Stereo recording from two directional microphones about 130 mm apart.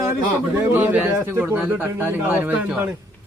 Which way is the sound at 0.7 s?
15° right (ahead or behind).